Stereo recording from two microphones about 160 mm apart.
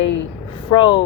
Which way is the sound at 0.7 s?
30° left (ahead or behind).